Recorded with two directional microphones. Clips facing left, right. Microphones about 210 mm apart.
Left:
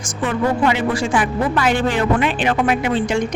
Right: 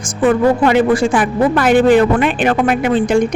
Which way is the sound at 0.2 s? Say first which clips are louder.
Right 7 dB; 55° right (ahead or behind).